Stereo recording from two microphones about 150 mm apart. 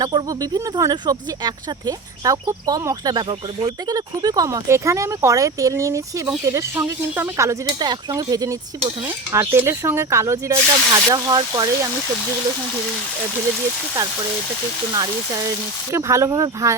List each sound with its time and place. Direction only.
0.0 s speech: 25° right (ahead or behind)
15.9 s speech: 20° right (ahead or behind)